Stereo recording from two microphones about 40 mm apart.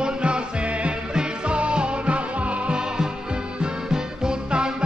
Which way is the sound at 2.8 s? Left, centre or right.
Right.